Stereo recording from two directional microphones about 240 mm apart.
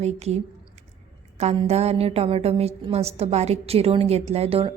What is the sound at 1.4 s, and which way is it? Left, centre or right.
Speech, right.